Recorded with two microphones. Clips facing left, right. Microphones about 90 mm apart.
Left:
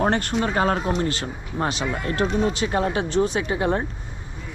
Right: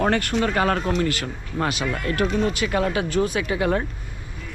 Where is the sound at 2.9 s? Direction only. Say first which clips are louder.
Left 1 dB; 55° right (ahead or behind).